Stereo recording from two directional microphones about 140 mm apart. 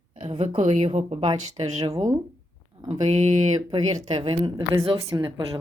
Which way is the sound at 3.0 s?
50° right (ahead or behind).